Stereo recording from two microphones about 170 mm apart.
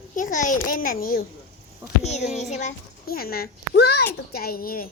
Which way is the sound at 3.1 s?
60° left (ahead or behind).